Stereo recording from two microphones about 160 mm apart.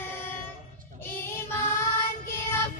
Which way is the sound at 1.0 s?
15° left (ahead or behind).